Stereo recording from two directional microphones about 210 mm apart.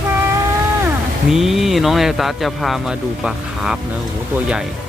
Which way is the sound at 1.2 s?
Centre (ahead or behind).